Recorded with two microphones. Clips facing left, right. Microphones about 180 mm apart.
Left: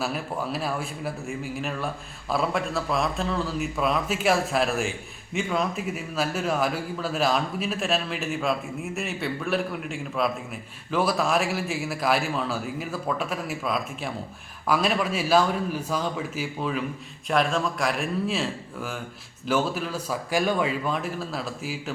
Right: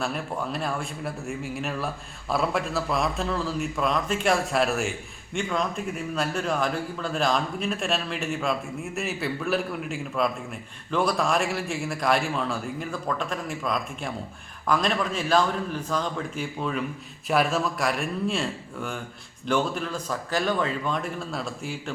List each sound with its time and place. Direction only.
0.0 s a man's voice: 5° left (ahead or behind)